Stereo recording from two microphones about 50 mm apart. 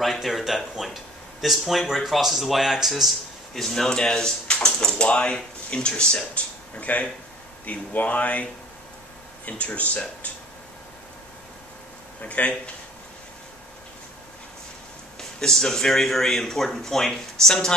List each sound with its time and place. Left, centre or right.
0.0 s speech: centre; by 8.5 s left
9.5 s speech: left
12.2 s speech: left
15.1 s speech: centre